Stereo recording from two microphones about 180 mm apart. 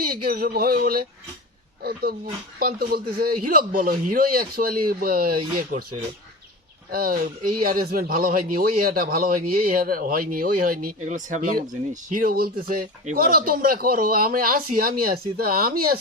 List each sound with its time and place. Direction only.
0.0 s speech: 55° right (ahead or behind)
6.9 s speech: 55° right (ahead or behind)